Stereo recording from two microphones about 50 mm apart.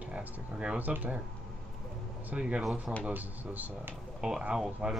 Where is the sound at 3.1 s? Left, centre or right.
Right.